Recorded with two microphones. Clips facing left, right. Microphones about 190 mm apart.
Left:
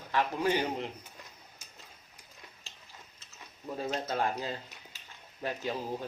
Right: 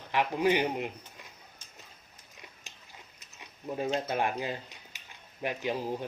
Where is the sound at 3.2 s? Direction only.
15° right (ahead or behind).